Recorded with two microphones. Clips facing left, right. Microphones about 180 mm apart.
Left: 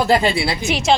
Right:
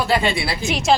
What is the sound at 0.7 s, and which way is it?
Speech, centre (ahead or behind).